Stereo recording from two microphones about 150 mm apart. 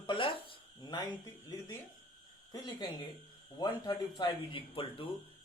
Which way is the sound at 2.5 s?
25° left (ahead or behind).